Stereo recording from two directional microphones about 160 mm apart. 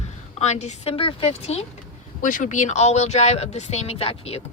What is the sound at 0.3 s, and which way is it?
Speech, 45° left (ahead or behind).